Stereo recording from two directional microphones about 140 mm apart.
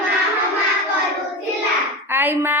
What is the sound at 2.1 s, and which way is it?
Speech, 15° right (ahead or behind).